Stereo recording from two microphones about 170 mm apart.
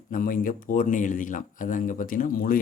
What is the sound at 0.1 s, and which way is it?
Speech, 55° left (ahead or behind).